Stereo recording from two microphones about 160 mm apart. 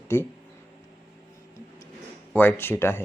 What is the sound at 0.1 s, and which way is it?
Speech, 15° left (ahead or behind).